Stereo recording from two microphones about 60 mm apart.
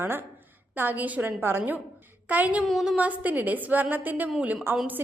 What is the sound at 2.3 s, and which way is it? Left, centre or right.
Speech, right.